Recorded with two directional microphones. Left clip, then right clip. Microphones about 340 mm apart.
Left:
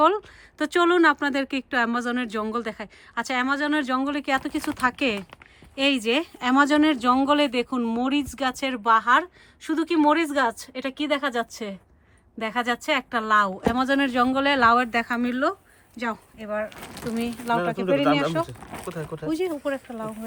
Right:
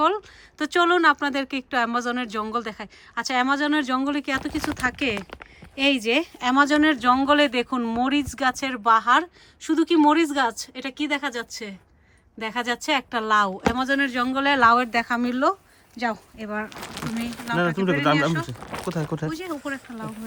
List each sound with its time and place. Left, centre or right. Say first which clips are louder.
0.0 s speech: left 2 dB; centre
18.4 s speech: right 4 dB; right
19.3 s speech: left 4 dB; centre